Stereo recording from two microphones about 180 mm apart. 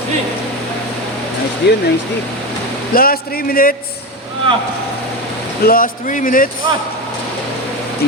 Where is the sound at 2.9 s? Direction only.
55° left (ahead or behind).